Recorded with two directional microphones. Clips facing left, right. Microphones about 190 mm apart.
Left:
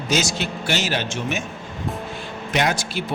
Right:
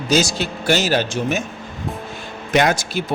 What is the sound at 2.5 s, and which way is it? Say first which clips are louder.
Speech: right 5 dB; 50° right (ahead or behind).